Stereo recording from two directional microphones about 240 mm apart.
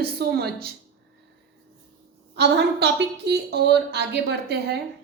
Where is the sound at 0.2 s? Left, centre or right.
Right.